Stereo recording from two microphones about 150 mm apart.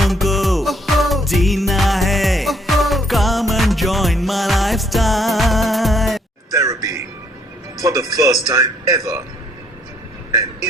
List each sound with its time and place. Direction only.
0.0 s music: centre (ahead or behind)
6.5 s a sound: 20° right (ahead or behind)
7.8 s a man's voice: 25° right (ahead or behind)